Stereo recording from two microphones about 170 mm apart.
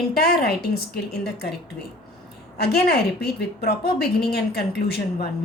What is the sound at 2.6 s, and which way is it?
A woman's voice, 70° left (ahead or behind).